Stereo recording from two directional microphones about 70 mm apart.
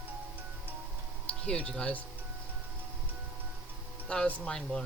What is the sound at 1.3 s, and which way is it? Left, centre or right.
Speech, centre.